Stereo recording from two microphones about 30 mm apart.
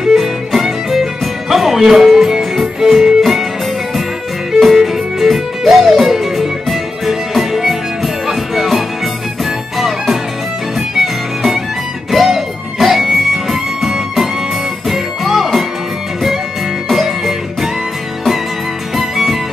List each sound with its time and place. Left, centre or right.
0.0 s music: centre
4.6 s music: centre
12.1 s music: centre
16.9 s music: centre
18.9 s music: centre